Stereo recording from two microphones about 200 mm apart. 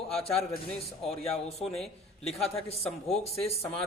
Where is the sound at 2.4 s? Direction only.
30° left (ahead or behind).